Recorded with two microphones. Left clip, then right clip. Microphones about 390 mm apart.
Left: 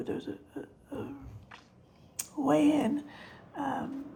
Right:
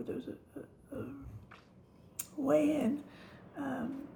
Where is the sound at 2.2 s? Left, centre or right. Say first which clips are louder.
Left 3 dB; centre.